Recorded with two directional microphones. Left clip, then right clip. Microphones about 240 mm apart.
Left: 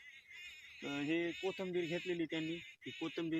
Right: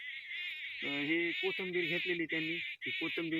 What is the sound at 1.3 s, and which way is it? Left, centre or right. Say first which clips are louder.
Speech: right 5 dB; left.